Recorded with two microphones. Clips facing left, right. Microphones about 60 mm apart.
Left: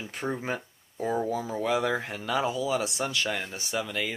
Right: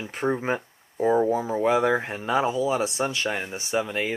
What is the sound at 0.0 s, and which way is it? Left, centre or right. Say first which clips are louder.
Speech: right 6 dB; right.